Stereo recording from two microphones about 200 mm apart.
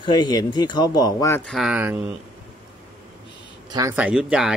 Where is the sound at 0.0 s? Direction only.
20° left (ahead or behind).